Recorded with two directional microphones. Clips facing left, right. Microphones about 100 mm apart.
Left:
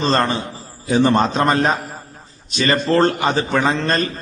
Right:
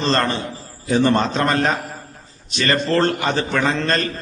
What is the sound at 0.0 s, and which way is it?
A man's voice, 15° left (ahead or behind).